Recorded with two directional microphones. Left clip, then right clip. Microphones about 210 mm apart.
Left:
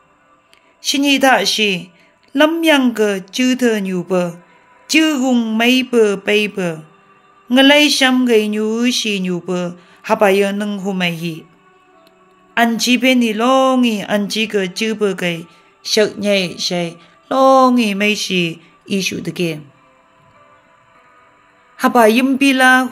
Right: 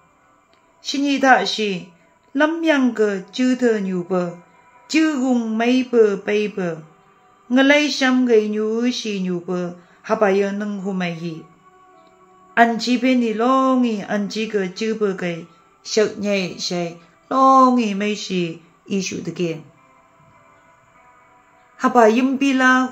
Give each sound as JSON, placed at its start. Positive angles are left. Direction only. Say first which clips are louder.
{"t": 0.8, "sound": "speech", "louder": "left 3 dB", "side_deg": 55}
{"t": 12.5, "sound": "speech", "louder": "left 1 dB", "side_deg": 50}
{"t": 21.7, "sound": "speech", "louder": "left 3 dB", "side_deg": 50}